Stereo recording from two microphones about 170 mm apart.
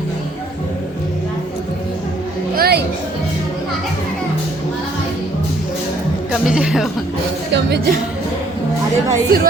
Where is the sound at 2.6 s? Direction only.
70° right (ahead or behind).